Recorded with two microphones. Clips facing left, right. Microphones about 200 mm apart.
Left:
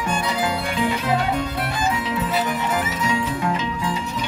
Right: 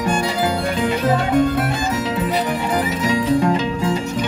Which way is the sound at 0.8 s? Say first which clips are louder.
Right 2 dB; 50° right (ahead or behind).